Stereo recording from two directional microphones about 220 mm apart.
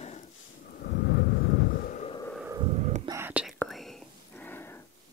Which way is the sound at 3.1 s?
10° right (ahead or behind).